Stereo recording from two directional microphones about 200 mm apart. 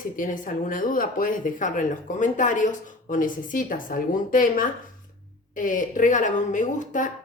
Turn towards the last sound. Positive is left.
turn(degrees=40)  # may be behind; listen again after turning